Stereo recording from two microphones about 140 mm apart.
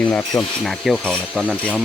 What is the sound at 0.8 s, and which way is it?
Speech, 5° left (ahead or behind).